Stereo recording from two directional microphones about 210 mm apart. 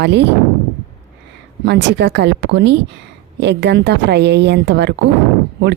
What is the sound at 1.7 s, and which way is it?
A woman's voice, 55° right (ahead or behind).